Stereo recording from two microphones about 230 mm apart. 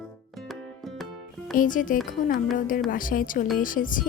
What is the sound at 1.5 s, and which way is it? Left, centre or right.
A woman's voice, left.